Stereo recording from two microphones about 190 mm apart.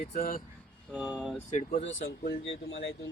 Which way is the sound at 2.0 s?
55° left (ahead or behind).